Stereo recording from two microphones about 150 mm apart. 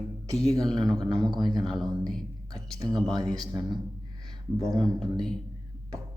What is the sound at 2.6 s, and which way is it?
Speech, 25° right (ahead or behind).